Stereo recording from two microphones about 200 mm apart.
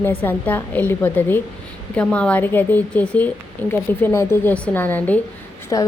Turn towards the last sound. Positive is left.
turn(degrees=20)  # may be behind; listen again after turning